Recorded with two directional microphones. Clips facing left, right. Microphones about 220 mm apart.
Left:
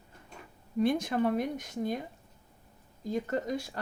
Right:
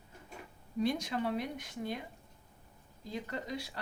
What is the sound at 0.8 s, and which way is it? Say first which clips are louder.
Speech: left 6 dB; 55° left (ahead or behind).